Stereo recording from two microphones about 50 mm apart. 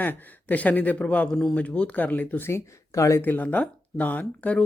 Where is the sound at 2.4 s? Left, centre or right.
Left.